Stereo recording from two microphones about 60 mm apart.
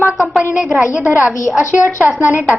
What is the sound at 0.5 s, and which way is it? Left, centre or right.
Speech, centre.